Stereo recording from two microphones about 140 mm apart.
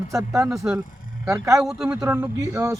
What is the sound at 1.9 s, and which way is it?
Speech, 20° right (ahead or behind).